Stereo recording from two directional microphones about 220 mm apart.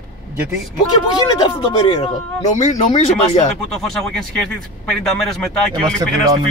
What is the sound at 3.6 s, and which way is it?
Speech, centre (ahead or behind).